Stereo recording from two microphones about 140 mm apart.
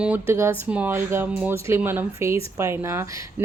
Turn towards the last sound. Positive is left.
turn(degrees=-20)  # may be behind; listen again after turning